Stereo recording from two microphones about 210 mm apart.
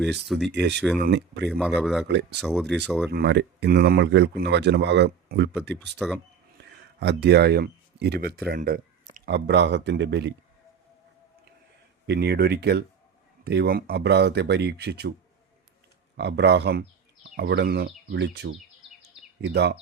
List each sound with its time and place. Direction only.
0.3 s speech: centre (ahead or behind)
0.5 s speech: 55° right (ahead or behind)
0.8 s speech: centre (ahead or behind)
1.0 s speech: 55° right (ahead or behind)
1.5 s speech: centre (ahead or behind)
2.0 s speech: 55° right (ahead or behind)
2.4 s speech: centre (ahead or behind)
3.1 s speech: 50° right (ahead or behind)
7.0 s speech: 55° right (ahead or behind)
12.0 s speech: 50° right (ahead or behind)
16.1 s speech: 55° right (ahead or behind)